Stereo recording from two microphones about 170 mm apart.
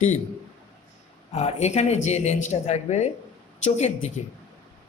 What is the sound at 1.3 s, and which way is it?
A man's voice, 40° left (ahead or behind).